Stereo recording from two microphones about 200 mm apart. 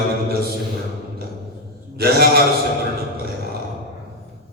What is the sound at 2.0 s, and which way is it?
Mantra, 50° right (ahead or behind).